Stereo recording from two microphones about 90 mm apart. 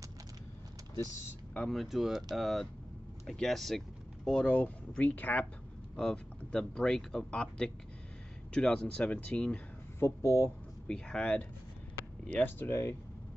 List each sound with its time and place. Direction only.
1.7 s speech: centre (ahead or behind)
9.9 s speech: 30° left (ahead or behind)
10.9 s speech: 10° left (ahead or behind)